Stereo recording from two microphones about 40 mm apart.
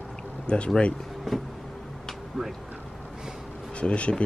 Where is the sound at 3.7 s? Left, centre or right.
Left.